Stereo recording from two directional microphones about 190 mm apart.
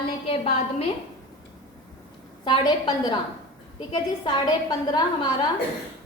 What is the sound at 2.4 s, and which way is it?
A woman's voice, 20° left (ahead or behind).